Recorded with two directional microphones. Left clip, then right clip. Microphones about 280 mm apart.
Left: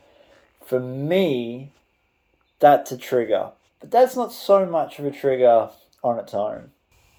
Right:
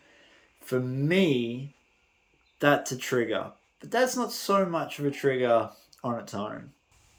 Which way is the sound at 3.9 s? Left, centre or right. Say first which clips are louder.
Left 9 dB; right.